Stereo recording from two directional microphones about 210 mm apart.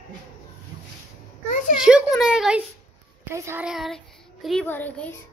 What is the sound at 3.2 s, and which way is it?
A child's voice, 15° right (ahead or behind).